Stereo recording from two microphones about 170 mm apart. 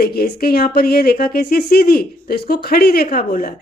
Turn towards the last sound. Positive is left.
turn(degrees=60)  # may be behind; listen again after turning